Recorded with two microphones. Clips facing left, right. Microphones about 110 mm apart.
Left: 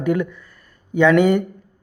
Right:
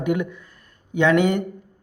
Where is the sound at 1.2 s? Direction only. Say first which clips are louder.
Left 4 dB; 5° left (ahead or behind).